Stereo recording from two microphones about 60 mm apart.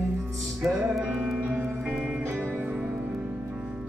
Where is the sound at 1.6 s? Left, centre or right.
Right.